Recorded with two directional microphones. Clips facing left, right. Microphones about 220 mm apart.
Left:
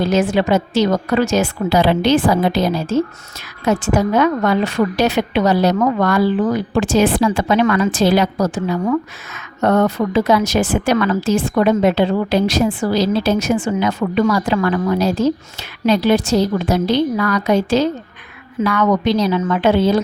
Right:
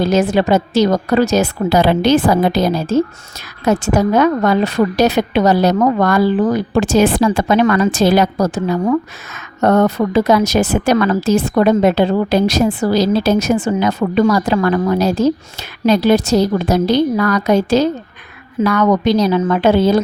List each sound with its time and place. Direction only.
0.0 s a woman's voice: 40° right (ahead or behind)